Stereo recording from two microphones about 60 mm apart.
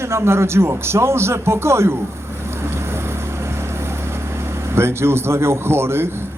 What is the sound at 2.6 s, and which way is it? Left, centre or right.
Vehicle, right.